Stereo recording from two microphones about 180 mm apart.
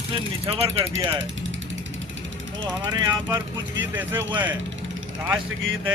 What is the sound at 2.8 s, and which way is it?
Speech, 25° right (ahead or behind).